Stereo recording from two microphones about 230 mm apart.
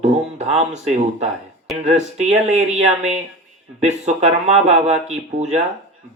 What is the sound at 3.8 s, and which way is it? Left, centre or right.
Speech, right.